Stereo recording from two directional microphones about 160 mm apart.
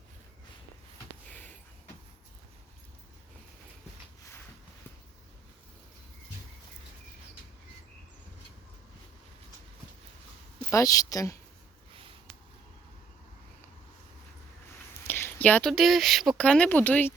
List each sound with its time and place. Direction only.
10.7 s speech: 20° left (ahead or behind)
15.0 s speech: 15° left (ahead or behind)